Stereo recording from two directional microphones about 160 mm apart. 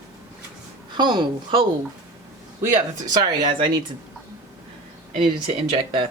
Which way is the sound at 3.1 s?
25° right (ahead or behind).